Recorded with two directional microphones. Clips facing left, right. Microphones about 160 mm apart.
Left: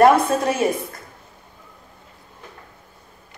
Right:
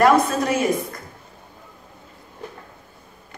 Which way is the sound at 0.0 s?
30° left (ahead or behind).